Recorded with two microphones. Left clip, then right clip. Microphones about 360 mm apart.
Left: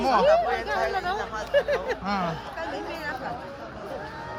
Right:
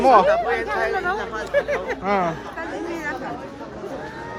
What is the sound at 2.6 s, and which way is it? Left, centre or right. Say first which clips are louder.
Chatter: right 3 dB; left.